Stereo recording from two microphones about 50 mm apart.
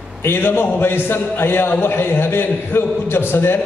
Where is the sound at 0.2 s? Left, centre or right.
Left.